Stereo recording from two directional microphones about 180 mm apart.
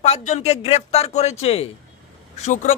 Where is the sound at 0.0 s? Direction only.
35° left (ahead or behind).